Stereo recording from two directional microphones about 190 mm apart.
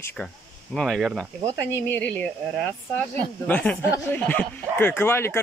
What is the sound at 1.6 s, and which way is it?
Speech, 10° left (ahead or behind).